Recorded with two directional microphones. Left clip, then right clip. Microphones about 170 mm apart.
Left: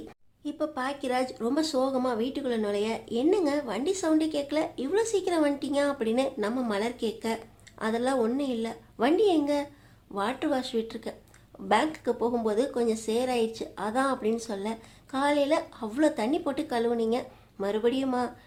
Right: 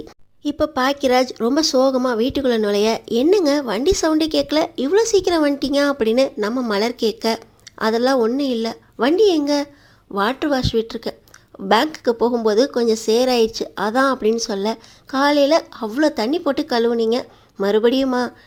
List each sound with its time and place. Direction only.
0.4 s speech: 35° right (ahead or behind)